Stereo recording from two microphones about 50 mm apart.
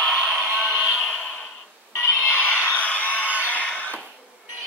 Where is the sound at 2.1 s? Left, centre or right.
Left.